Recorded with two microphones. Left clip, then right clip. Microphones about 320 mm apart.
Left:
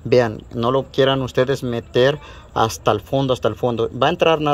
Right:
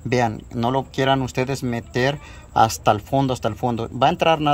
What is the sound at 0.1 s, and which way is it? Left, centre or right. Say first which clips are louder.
Speech: left 5 dB; centre.